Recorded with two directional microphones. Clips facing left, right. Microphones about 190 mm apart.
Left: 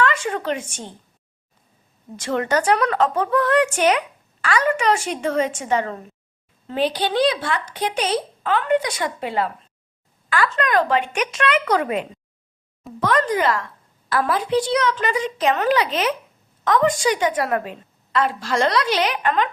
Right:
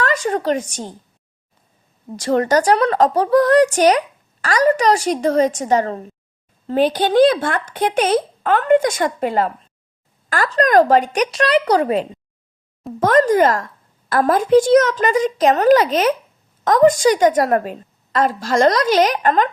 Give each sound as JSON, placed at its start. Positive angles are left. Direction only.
{"t": 0.0, "sound": "speech", "side_deg": -40}
{"t": 2.1, "sound": "speech", "side_deg": -40}
{"t": 13.0, "sound": "speech", "side_deg": -45}